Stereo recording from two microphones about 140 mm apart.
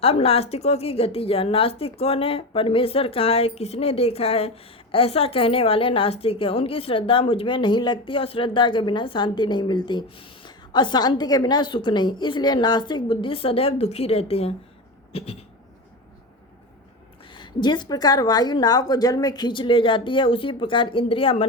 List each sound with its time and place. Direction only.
0.0 s a woman's voice: 45° left (ahead or behind)
17.3 s a woman's voice: 30° left (ahead or behind)